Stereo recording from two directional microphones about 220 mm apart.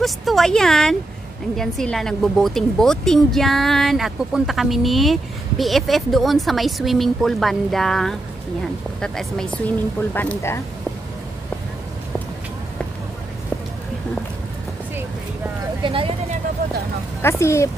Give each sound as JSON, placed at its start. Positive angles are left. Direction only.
{"t": 0.0, "sound": "a woman's voice", "side_deg": 0}
{"t": 15.8, "sound": "vehicle", "side_deg": -25}
{"t": 17.2, "sound": "speech", "side_deg": 10}